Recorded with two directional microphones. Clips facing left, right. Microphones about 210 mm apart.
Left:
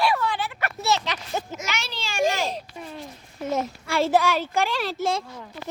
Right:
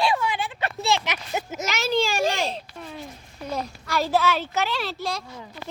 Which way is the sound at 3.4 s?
20° left (ahead or behind).